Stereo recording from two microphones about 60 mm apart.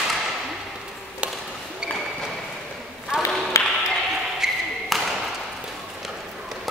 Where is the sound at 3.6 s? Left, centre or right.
Left.